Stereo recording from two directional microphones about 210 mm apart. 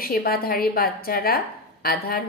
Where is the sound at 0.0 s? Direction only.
45° left (ahead or behind).